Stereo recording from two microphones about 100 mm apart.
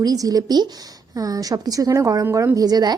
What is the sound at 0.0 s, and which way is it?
A woman's voice, 40° right (ahead or behind).